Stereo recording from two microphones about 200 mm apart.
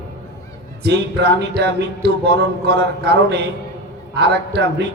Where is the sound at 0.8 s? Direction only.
55° right (ahead or behind).